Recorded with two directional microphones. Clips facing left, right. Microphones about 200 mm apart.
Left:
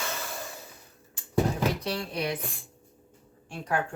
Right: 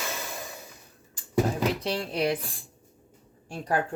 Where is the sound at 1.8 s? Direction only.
30° right (ahead or behind).